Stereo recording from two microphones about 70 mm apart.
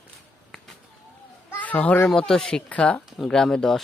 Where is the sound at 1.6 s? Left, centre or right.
Left.